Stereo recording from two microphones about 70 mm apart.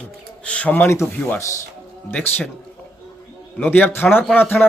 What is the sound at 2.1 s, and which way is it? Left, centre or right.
Speech, left.